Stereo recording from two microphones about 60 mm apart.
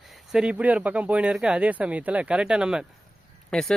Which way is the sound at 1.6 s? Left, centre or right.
Right.